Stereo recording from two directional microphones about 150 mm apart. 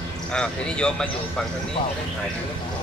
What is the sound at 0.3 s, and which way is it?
Speech, 5° left (ahead or behind).